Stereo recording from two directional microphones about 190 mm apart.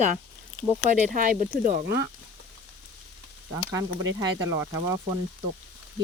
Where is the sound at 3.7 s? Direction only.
20° right (ahead or behind).